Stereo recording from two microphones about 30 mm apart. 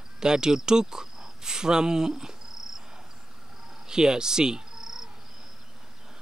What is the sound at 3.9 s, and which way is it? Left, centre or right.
Cricket, right.